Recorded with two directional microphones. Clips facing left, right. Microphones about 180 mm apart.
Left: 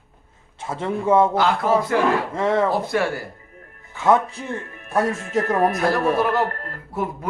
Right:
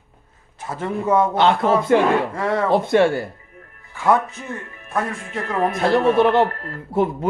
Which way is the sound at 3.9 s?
20° left (ahead or behind).